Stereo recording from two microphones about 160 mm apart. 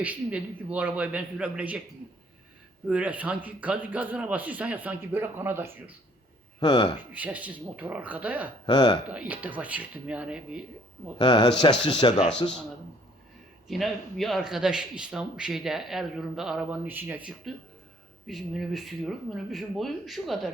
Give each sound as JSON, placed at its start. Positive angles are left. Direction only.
{"t": 0.0, "sound": "a man's voice", "side_deg": -10}
{"t": 2.8, "sound": "a man's voice", "side_deg": -10}
{"t": 6.6, "sound": "speech", "side_deg": 30}
{"t": 7.1, "sound": "a man's voice", "side_deg": -10}
{"t": 8.6, "sound": "speech", "side_deg": 30}
{"t": 9.0, "sound": "a man's voice", "side_deg": -10}
{"t": 11.2, "sound": "speech", "side_deg": 30}
{"t": 13.7, "sound": "a man's voice", "side_deg": 0}